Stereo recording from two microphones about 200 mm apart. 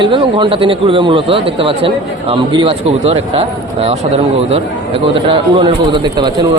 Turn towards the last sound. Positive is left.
turn(degrees=-25)  # may be behind; listen again after turning